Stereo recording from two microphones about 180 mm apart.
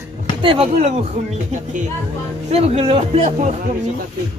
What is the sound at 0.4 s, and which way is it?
Speech, 30° right (ahead or behind).